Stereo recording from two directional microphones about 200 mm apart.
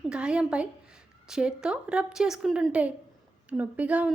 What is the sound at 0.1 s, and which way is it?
A woman's voice, 5° right (ahead or behind).